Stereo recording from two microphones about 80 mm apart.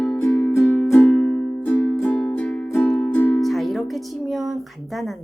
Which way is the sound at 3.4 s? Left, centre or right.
Centre.